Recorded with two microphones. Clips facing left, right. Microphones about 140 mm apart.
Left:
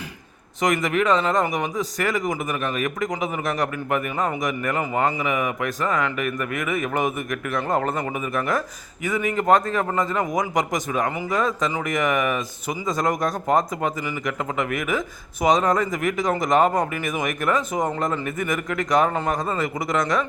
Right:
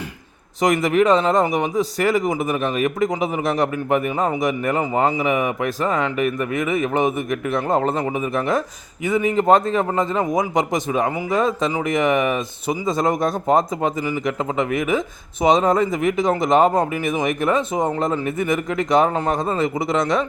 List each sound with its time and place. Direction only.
0.6 s a man's voice: 35° right (ahead or behind)